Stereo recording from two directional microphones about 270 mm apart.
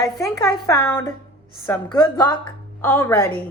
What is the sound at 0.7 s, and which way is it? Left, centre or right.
Speech, centre.